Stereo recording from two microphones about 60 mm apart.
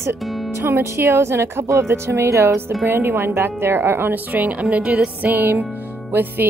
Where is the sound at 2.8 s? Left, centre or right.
Right.